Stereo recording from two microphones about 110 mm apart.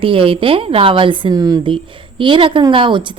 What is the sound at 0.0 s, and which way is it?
Speech, 55° right (ahead or behind).